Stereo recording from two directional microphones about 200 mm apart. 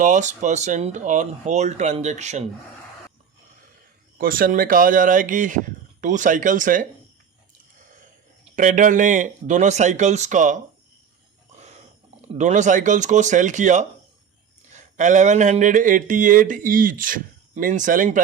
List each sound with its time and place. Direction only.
0.0 s speech: 40° right (ahead or behind)
4.2 s speech: 45° right (ahead or behind)
8.5 s speech: 40° right (ahead or behind)
12.3 s speech: 35° right (ahead or behind)